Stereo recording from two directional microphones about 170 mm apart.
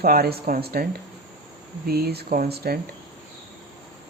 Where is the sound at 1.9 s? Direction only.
65° right (ahead or behind).